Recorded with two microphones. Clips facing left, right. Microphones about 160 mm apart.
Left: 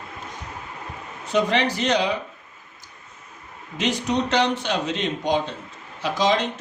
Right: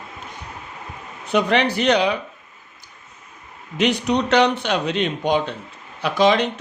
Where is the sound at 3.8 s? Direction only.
65° right (ahead or behind).